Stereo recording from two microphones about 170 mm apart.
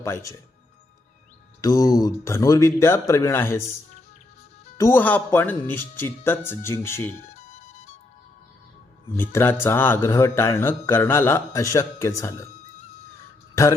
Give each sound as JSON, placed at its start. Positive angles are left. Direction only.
{"t": 0.0, "sound": "speech", "side_deg": 15}
{"t": 1.6, "sound": "speech", "side_deg": 20}
{"t": 4.8, "sound": "speech", "side_deg": 15}
{"t": 7.3, "sound": "music", "side_deg": 40}
{"t": 9.1, "sound": "speech", "side_deg": 15}